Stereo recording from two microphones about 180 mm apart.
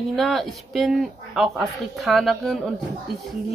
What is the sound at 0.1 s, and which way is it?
A woman's voice, centre (ahead or behind).